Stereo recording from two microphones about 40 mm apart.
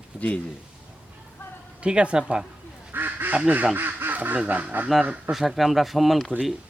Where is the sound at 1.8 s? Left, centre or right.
Right.